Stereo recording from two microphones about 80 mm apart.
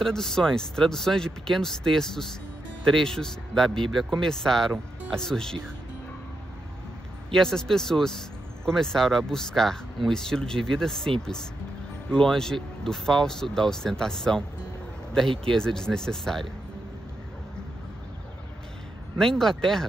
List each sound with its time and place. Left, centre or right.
0.0 s speech: centre
7.3 s speech: centre
12.1 s speech: centre
15.4 s speech: centre
19.1 s speech: centre